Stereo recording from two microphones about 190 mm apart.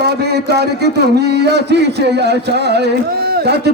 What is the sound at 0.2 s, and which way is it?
A man's voice, 60° right (ahead or behind).